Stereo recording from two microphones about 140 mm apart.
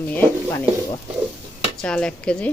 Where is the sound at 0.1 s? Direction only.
10° left (ahead or behind).